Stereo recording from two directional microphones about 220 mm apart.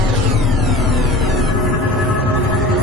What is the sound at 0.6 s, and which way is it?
Music, centre (ahead or behind).